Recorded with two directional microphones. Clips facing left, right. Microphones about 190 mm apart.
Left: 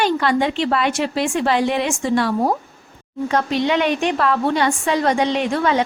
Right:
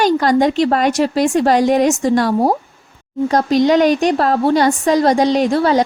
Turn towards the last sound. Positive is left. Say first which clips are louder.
# right 5 dB
turn(degrees=-35)  # may be behind; listen again after turning